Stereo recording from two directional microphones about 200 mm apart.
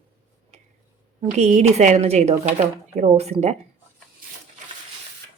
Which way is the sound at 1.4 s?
35° right (ahead or behind).